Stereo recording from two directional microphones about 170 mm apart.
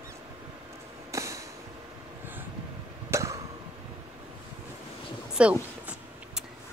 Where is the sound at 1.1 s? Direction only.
20° right (ahead or behind).